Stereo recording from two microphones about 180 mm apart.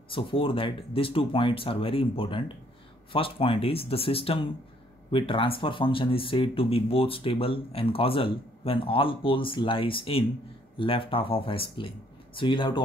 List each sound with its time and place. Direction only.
0.1 s speech: 30° left (ahead or behind)